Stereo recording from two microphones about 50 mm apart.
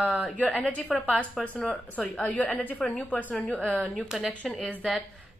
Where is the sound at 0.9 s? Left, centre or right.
Centre.